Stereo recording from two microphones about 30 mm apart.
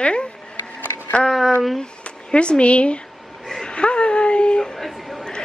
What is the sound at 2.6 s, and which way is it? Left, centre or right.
Speech, left.